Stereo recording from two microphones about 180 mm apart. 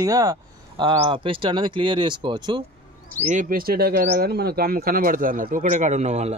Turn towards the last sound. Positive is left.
turn(degrees=-40)  # may be behind; listen again after turning